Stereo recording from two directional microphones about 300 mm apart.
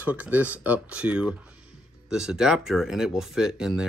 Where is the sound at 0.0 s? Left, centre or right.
Centre.